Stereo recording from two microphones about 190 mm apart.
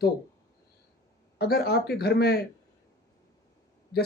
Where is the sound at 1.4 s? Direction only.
55° left (ahead or behind).